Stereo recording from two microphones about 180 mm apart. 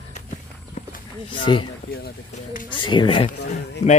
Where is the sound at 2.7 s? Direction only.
25° left (ahead or behind).